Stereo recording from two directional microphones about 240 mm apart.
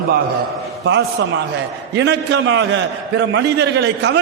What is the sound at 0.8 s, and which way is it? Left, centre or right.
A man's voice, right.